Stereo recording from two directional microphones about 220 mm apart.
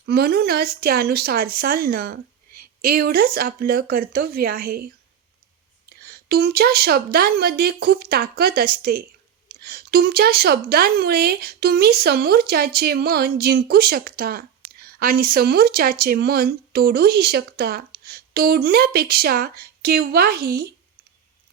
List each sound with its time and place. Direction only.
0.0 s speech: 45° right (ahead or behind)
5.9 s speech: 45° right (ahead or behind)